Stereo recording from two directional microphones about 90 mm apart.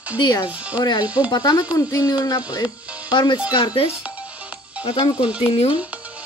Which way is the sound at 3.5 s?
80° left.